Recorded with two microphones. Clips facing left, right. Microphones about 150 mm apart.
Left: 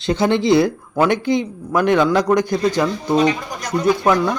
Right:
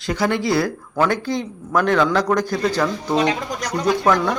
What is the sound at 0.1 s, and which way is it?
Speech, 25° left (ahead or behind).